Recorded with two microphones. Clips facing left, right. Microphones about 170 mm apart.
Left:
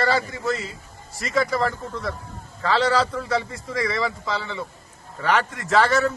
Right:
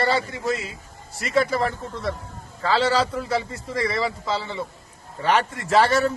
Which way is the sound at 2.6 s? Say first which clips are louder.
Even; 30° right (ahead or behind).